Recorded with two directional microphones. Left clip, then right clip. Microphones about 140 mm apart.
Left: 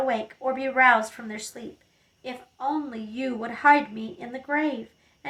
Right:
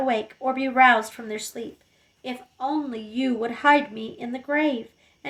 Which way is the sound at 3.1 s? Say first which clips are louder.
Right 4 dB; 25° right (ahead or behind).